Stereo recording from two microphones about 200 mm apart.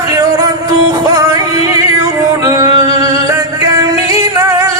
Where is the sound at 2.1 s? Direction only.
15° right (ahead or behind).